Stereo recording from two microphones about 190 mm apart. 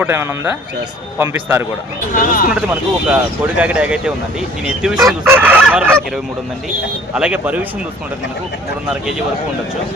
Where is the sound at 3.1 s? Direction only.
5° right (ahead or behind).